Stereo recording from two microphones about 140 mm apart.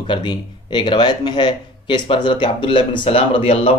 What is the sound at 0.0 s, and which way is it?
Speech, 35° left (ahead or behind).